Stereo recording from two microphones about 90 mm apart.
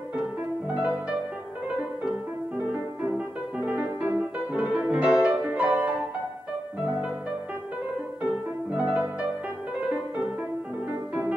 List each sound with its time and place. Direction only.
2.5 s music: 15° right (ahead or behind)
8.7 s music: 15° right (ahead or behind)